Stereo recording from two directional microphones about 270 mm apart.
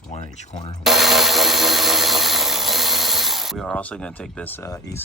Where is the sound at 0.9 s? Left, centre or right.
Centre.